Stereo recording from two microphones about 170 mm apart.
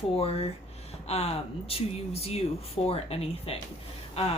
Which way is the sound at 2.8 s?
35° left (ahead or behind).